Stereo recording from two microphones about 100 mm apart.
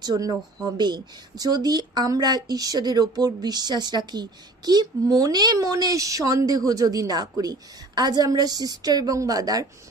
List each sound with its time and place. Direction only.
0.0 s speech: 40° right (ahead or behind)